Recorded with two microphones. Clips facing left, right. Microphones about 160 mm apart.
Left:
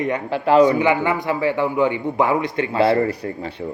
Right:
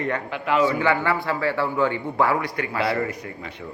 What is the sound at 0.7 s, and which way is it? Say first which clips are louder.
A man's voice: left 4 dB; 15° left (ahead or behind).